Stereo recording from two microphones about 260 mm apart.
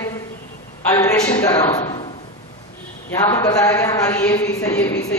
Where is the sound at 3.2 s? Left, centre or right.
Centre.